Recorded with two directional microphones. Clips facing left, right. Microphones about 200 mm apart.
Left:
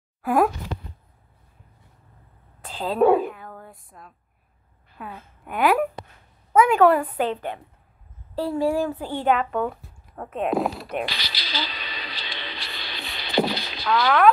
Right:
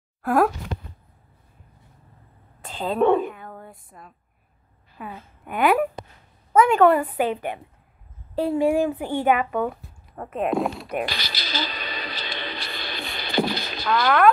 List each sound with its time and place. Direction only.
0.2 s speech: centre (ahead or behind)
2.6 s a woman's voice: centre (ahead or behind)
11.1 s a sound: 45° right (ahead or behind)